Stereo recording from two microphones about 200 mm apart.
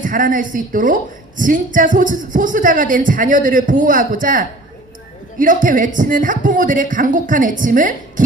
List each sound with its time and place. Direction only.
0.0 s speech: 40° right (ahead or behind)